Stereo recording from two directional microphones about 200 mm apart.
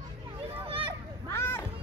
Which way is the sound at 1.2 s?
10° left (ahead or behind).